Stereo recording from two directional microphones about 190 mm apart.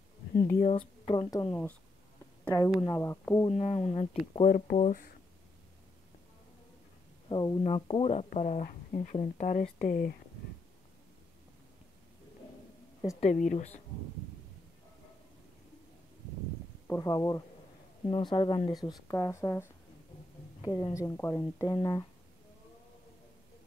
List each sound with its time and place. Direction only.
0.6 s speech: 30° left (ahead or behind)
1.3 s speech: 15° left (ahead or behind)
3.4 s speech: 35° left (ahead or behind)
4.5 s speech: 50° left (ahead or behind)
7.2 s speech: 25° left (ahead or behind); by 10.1 s 45° left (ahead or behind)
13.2 s speech: 40° left (ahead or behind)
16.8 s speech: 15° left (ahead or behind)
18.9 s speech: 15° left (ahead or behind)